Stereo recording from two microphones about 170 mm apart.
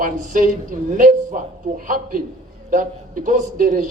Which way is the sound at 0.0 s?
50° right (ahead or behind).